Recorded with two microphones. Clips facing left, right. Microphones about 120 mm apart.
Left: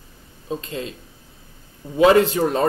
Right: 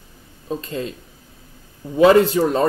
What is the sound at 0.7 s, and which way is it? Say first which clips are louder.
Speech: right 3 dB; 35° right (ahead or behind).